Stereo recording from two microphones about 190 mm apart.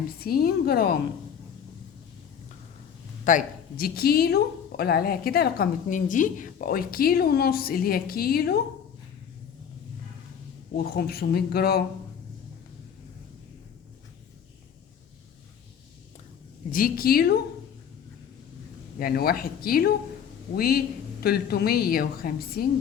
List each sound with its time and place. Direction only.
0.2 s speech: 50° left (ahead or behind)
3.2 s speech: 45° left (ahead or behind)
10.9 s speech: 55° left (ahead or behind)
16.7 s speech: 50° left (ahead or behind)
18.9 s speech: 50° left (ahead or behind)